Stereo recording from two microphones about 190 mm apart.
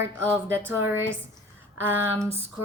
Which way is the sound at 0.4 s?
10° right (ahead or behind).